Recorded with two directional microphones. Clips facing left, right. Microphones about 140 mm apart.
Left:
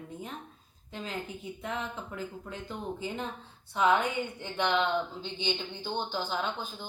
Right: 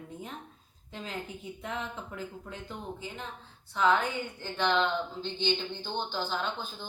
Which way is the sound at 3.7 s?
15° left (ahead or behind).